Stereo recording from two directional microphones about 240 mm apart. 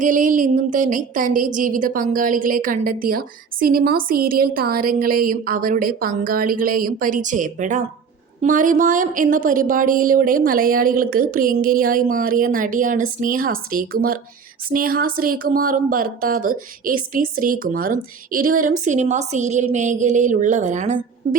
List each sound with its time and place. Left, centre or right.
0.0 s a woman's voice: right